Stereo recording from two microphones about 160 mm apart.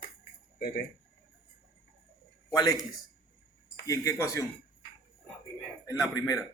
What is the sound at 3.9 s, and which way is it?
Speech, 20° left (ahead or behind).